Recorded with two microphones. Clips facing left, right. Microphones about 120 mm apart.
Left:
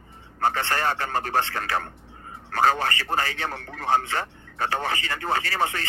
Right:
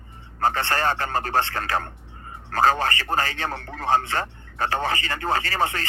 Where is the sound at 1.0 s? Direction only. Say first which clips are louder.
Right 1 dB; 40° right (ahead or behind).